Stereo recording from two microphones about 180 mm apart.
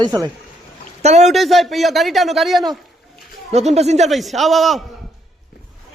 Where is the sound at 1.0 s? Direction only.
40° right (ahead or behind).